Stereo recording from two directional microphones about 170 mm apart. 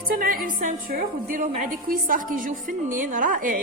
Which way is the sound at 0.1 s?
55° right (ahead or behind).